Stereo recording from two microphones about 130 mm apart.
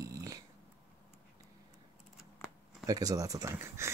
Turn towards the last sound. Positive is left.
turn(degrees=-20)  # may be behind; listen again after turning